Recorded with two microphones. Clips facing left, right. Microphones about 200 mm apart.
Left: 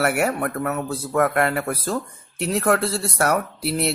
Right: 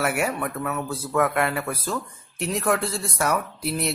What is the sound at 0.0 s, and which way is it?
Speech, 60° left (ahead or behind).